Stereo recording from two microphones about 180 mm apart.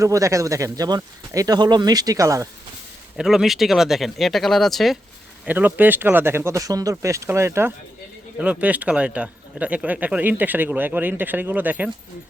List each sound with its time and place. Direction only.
0.0 s speech: 15° right (ahead or behind)
3.2 s speech: centre (ahead or behind)
5.5 s speech: 10° right (ahead or behind)